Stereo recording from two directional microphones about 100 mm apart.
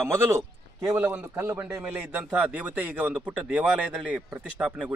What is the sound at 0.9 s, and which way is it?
A man's voice, 15° right (ahead or behind).